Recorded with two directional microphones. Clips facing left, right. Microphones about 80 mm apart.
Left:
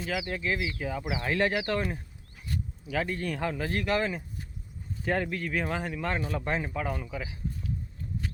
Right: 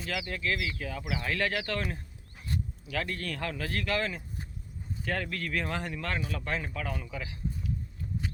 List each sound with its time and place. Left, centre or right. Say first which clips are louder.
0.1 s a man's voice: left 1 dB; centre
6.1 s speech: left 4 dB; left